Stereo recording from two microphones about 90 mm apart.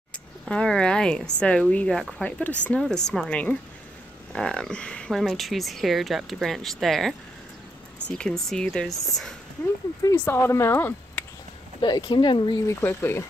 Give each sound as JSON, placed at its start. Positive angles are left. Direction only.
{"t": 0.5, "sound": "speech", "side_deg": 10}
{"t": 2.2, "sound": "speech", "side_deg": 15}
{"t": 8.2, "sound": "speech", "side_deg": 5}
{"t": 10.2, "sound": "speech", "side_deg": 25}
{"t": 11.8, "sound": "speech", "side_deg": 60}
{"t": 12.6, "sound": "speech", "side_deg": 30}